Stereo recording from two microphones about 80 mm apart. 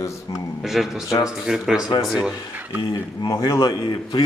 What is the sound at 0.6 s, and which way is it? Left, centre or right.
Speech, centre.